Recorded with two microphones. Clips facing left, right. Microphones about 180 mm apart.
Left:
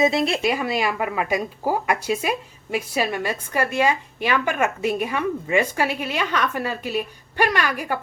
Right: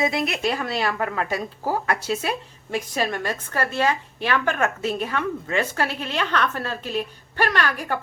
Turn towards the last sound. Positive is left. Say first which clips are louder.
# left 1 dB
turn(degrees=10)  # may be behind; listen again after turning